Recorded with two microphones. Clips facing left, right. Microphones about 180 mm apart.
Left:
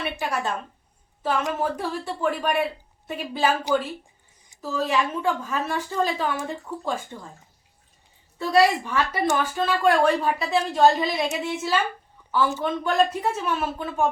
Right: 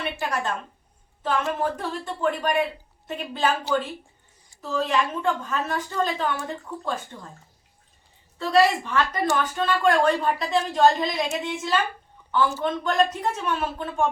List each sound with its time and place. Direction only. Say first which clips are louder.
0.2 s speech: even; 10° left (ahead or behind)
8.4 s speech: even; 10° left (ahead or behind)